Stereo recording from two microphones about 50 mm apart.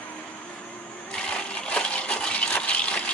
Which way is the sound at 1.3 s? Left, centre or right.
Left.